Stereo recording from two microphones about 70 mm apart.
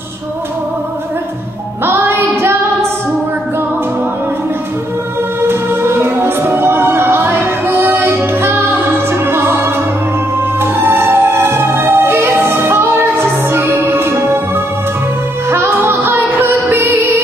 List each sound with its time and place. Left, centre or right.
1.9 s music: right
5.4 s music: right
10.6 s music: right
15.5 s music: right